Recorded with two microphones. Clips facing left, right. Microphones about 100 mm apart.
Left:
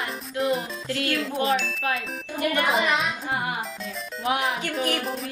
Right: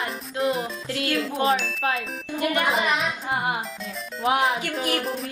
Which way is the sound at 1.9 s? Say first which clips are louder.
Right 1 dB; 25° right (ahead or behind).